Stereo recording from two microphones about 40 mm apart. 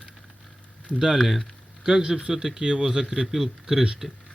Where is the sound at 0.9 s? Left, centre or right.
Centre.